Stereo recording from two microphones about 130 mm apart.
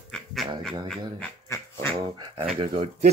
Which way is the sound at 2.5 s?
45° right (ahead or behind).